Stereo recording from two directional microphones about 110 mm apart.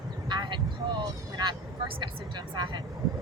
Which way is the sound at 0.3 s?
45° right (ahead or behind).